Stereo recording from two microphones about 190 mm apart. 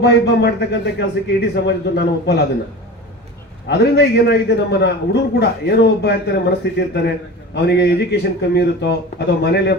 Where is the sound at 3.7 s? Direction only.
60° left (ahead or behind).